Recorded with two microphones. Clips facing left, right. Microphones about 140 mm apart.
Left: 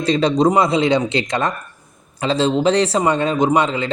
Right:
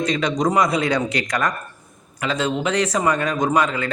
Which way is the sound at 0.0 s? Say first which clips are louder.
Left 5 dB; 30° left (ahead or behind).